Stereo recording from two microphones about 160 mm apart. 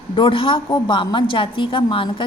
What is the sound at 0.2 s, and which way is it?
A woman's voice, 35° left (ahead or behind).